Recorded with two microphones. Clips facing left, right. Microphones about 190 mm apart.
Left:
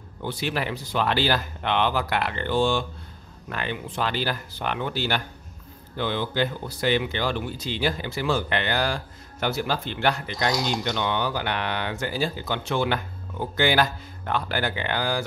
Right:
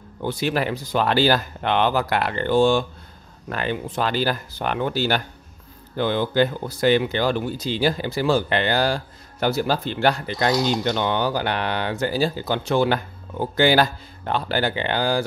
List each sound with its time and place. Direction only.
0.2 s speech: 45° right (ahead or behind)